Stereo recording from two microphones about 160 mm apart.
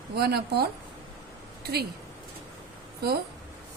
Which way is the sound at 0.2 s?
80° right.